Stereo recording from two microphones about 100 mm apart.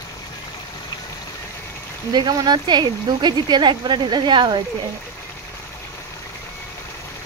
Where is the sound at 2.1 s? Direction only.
45° right (ahead or behind).